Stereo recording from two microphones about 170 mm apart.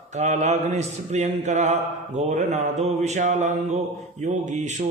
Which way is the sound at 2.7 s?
Centre (ahead or behind).